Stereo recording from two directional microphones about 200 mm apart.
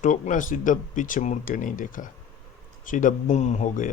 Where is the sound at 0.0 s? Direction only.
40° left (ahead or behind).